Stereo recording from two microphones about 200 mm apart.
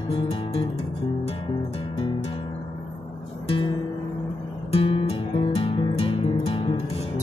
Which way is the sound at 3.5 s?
25° left (ahead or behind).